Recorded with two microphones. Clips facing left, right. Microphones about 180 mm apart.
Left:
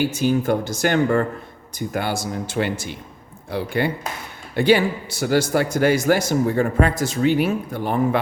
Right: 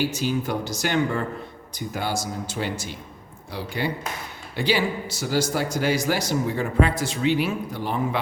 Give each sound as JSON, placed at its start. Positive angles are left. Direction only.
{"t": 0.0, "sound": "a man's voice", "side_deg": 50}